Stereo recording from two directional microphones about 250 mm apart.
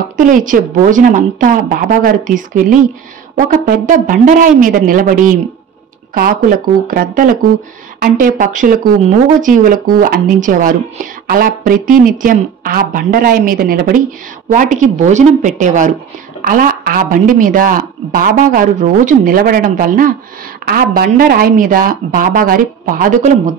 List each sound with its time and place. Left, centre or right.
0.2 s a woman's voice: right